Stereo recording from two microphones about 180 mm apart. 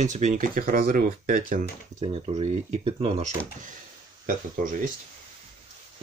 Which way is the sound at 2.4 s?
35° right (ahead or behind).